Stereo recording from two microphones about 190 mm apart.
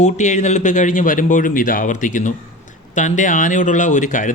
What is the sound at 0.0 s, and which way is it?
A man's voice, 40° left (ahead or behind).